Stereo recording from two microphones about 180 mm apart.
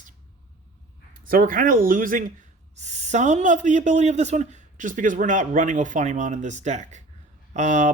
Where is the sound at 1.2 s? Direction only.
50° right (ahead or behind).